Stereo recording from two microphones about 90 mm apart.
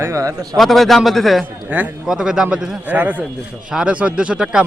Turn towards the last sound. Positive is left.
turn(degrees=-10)  # may be behind; listen again after turning